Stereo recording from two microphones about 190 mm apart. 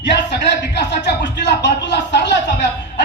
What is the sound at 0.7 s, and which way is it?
Speech, 60° left (ahead or behind).